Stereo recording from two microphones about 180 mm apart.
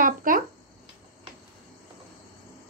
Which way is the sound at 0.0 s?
50° right (ahead or behind).